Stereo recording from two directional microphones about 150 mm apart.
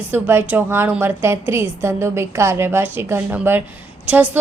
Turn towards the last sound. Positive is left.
turn(degrees=-10)  # may be behind; listen again after turning